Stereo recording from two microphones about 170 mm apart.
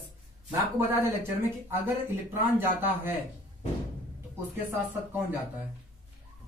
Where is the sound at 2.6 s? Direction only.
10° right (ahead or behind).